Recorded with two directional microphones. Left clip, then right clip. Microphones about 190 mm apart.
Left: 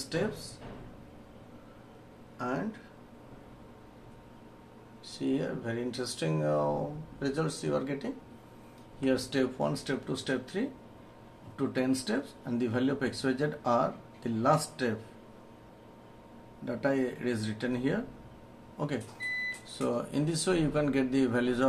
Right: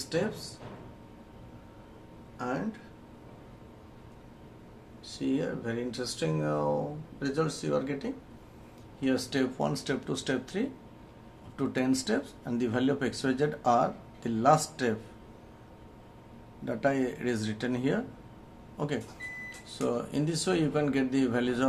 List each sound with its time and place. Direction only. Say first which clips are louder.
0.0 s speech: right 2 dB; centre (ahead or behind)
2.3 s speech: even; centre (ahead or behind)
5.0 s speech: right 1 dB; centre (ahead or behind)
16.6 s speech: right 2 dB; 15° right (ahead or behind)